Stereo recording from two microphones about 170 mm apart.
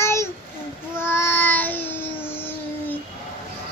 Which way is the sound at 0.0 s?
15° left (ahead or behind).